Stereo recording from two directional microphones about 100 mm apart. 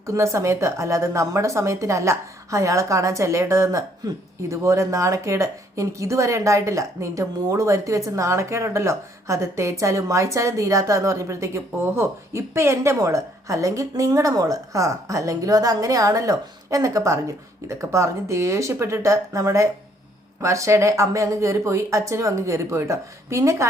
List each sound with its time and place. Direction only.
0.0 s speech: 30° right (ahead or behind)